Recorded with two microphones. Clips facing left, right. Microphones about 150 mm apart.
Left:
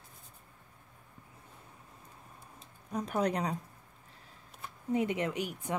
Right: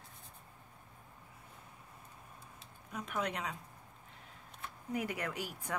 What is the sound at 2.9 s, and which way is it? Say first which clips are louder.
Speech: left 7 dB; 35° left (ahead or behind).